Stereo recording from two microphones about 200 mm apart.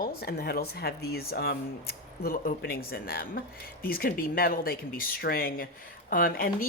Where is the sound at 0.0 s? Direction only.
50° left (ahead or behind).